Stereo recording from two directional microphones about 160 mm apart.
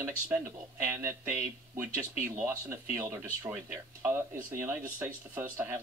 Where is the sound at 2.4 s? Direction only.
10° right (ahead or behind).